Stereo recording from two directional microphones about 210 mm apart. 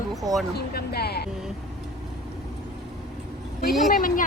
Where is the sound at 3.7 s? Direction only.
Centre (ahead or behind).